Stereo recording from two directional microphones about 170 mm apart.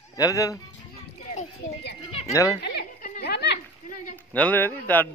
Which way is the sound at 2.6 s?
75° left (ahead or behind).